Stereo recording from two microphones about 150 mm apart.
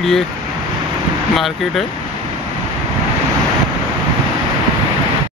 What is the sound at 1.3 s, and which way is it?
Speech, centre (ahead or behind).